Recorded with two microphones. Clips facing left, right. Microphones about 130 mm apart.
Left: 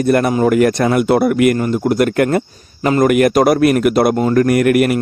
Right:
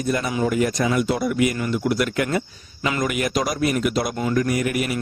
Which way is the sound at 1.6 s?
45° left (ahead or behind).